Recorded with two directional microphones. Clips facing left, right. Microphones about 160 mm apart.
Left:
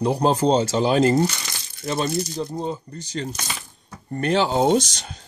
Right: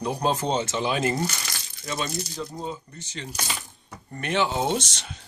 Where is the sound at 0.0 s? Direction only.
30° left (ahead or behind).